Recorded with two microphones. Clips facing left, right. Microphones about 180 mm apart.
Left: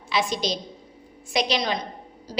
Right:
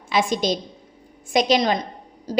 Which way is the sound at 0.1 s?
50° right (ahead or behind).